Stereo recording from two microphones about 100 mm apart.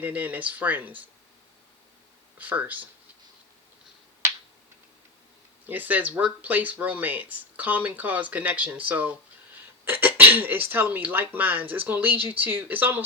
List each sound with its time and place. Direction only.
0.0 s speech: 15° right (ahead or behind)
2.4 s speech: 15° right (ahead or behind)
5.6 s speech: 20° right (ahead or behind)